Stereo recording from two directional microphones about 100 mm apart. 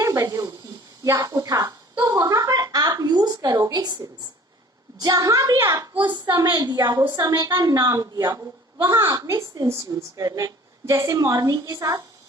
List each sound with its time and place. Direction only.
0.0 s a sound: 35° right (ahead or behind)
1.0 s a woman's voice: 35° right (ahead or behind)
6.0 s a woman's voice: 50° right (ahead or behind)